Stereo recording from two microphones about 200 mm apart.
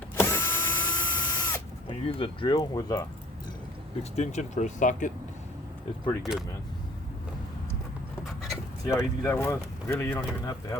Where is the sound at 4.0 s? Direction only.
35° left (ahead or behind).